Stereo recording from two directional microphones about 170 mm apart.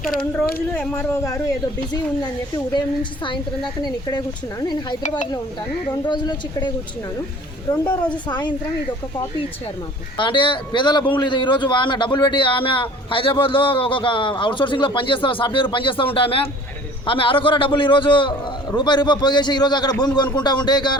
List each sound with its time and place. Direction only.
0.8 s speech: 10° left (ahead or behind)
2.7 s a man's voice: 30° left (ahead or behind)
6.1 s a man's voice: 25° left (ahead or behind)
10.2 s a man's voice: 30° left (ahead or behind)